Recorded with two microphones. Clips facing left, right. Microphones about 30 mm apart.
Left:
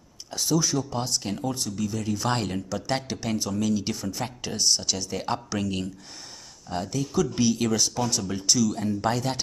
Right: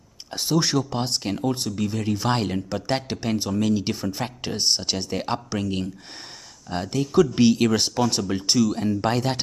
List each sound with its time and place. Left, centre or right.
0.3 s speech: right
0.6 s speech: right
1.2 s speech: right
2.2 s speech: centre
2.7 s speech: right
5.2 s speech: centre
6.7 s speech: right
8.7 s speech: right